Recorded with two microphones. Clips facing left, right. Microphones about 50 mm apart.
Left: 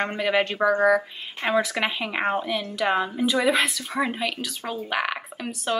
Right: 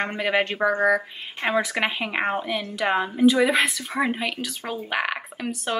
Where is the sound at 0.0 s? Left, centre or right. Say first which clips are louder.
Even; centre.